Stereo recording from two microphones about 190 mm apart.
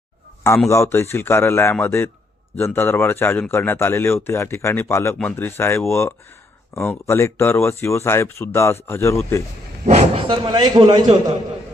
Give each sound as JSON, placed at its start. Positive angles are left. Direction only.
{"t": 0.7, "sound": "speech", "side_deg": 15}
{"t": 9.8, "sound": "speech", "side_deg": -35}
{"t": 10.2, "sound": "a man's voice", "side_deg": -25}